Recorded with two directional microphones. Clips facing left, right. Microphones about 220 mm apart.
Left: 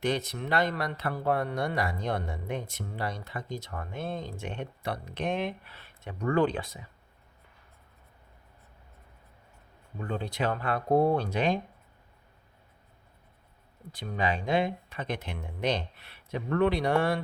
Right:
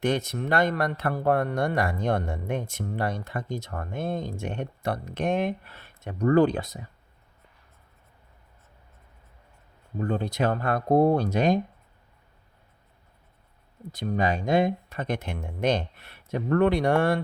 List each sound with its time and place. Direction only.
0.0 s speech: 45° right (ahead or behind)
10.0 s speech: 40° right (ahead or behind)
13.9 s speech: 40° right (ahead or behind)